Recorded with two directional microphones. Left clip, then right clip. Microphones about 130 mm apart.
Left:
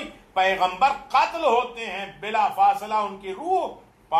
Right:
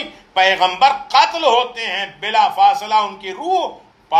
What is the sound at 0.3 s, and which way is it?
A man's voice, 25° right (ahead or behind).